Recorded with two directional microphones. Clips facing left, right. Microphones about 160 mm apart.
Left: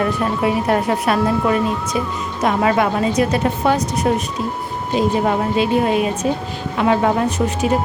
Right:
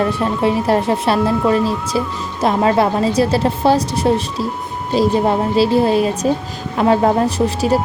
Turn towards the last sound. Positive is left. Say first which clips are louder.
# right 2 dB
turn(degrees=-35)  # may be behind; listen again after turning